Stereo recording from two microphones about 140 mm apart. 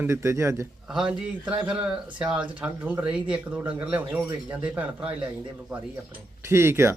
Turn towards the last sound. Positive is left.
turn(degrees=-20)  # may be behind; listen again after turning